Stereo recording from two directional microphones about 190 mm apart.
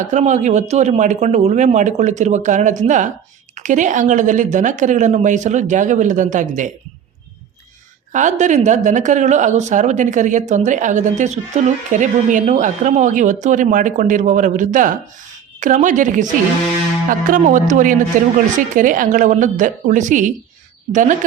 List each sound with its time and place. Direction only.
0.0 s speech: 40° right (ahead or behind)
8.1 s a woman's voice: 40° right (ahead or behind)